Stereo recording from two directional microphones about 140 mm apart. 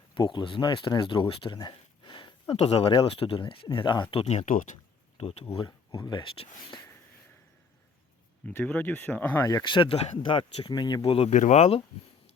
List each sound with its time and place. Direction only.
0.1 s speech: 35° left (ahead or behind)
4.1 s speech: 45° left (ahead or behind)
4.4 s speech: 70° left (ahead or behind)
5.1 s speech: 45° left (ahead or behind)
5.6 s speech: 30° left (ahead or behind)
8.4 s speech: 10° left (ahead or behind)
9.4 s speech: 25° left (ahead or behind); by 11.3 s 40° left (ahead or behind)
11.3 s speech: 60° left (ahead or behind)